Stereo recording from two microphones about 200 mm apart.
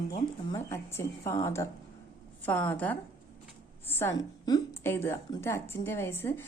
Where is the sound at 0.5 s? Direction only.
15° left (ahead or behind).